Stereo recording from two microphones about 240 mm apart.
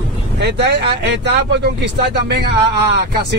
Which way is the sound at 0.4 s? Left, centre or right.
Right.